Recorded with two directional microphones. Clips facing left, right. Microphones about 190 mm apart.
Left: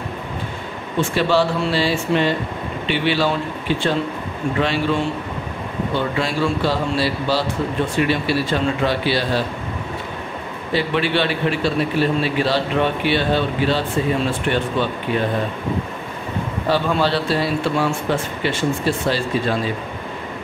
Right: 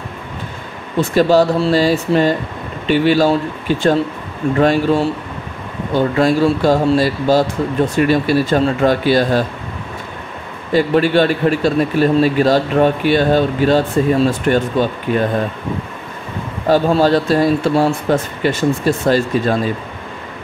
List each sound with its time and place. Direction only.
1.1 s a man's voice: 40° right (ahead or behind)
10.7 s a man's voice: 45° right (ahead or behind)
16.6 s a man's voice: 40° right (ahead or behind)